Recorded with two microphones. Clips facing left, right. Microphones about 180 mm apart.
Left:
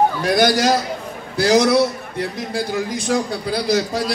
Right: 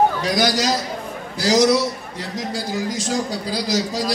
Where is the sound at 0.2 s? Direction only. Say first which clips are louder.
Left 4 dB; 55° left (ahead or behind).